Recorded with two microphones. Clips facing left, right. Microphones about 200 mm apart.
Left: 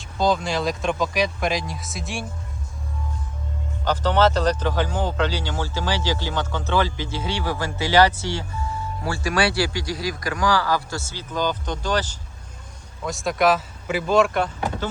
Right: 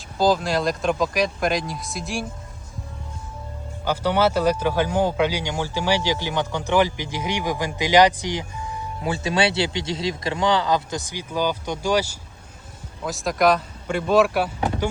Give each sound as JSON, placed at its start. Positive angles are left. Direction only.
{"t": 0.2, "sound": "speech", "side_deg": 0}
{"t": 3.8, "sound": "speech", "side_deg": -10}
{"t": 13.1, "sound": "speech", "side_deg": 0}